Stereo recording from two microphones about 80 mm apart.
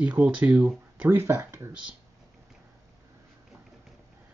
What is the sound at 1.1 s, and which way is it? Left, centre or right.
Speech, right.